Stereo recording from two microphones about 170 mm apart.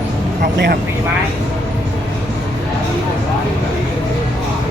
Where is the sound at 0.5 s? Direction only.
80° right.